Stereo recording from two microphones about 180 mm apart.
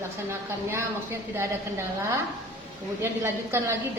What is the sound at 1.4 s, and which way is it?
A woman's voice, 15° right (ahead or behind).